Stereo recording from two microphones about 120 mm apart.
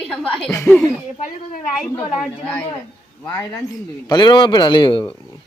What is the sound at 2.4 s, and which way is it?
Speech, 15° left (ahead or behind).